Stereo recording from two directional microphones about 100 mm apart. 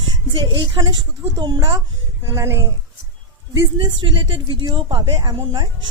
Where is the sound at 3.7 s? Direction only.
55° right (ahead or behind).